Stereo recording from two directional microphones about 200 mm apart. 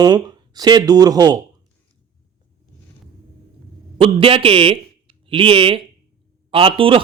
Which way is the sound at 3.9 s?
30° right (ahead or behind).